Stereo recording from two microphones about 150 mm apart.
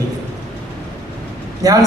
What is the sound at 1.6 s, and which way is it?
Speech, 25° right (ahead or behind).